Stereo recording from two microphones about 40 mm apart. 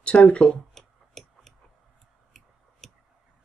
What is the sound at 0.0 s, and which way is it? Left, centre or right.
Speech, left.